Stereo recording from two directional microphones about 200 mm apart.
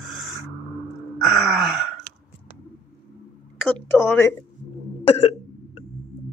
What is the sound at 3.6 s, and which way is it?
Speech, 5° left (ahead or behind).